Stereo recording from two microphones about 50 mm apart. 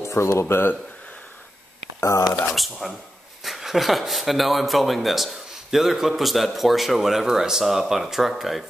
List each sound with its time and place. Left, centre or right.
0.0 s speech: left
2.0 s speech: left
2.5 s speech: centre